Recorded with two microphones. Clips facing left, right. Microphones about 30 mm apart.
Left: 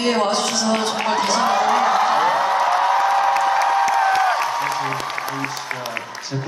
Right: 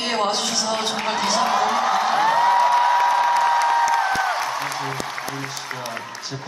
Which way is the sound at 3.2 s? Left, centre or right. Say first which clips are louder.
Left 1 dB; left.